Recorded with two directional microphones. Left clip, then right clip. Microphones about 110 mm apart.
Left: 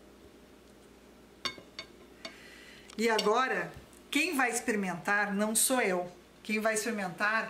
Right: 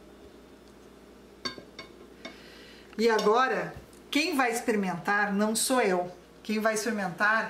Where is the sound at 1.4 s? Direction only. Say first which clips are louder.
Right 1 dB; 25° left (ahead or behind).